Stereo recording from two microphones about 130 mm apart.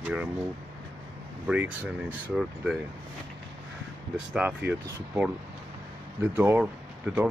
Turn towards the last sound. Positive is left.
turn(degrees=-10)  # may be behind; listen again after turning